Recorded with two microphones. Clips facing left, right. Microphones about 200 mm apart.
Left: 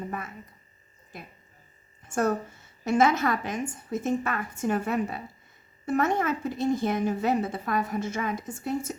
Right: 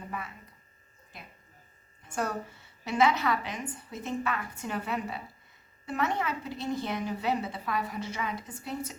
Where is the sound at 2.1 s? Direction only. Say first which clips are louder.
Left 7 dB; 45° left (ahead or behind).